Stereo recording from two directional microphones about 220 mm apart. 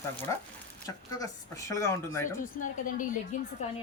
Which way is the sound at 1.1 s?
15° left (ahead or behind).